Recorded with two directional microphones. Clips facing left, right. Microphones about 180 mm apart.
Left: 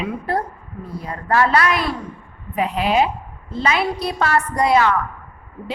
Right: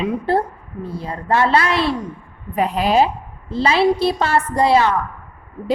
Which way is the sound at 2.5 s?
40° right (ahead or behind).